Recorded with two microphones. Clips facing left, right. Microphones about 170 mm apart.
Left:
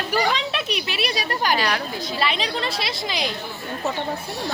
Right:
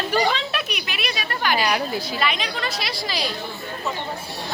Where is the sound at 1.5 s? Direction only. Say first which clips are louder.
Right 2 dB; 10° right (ahead or behind).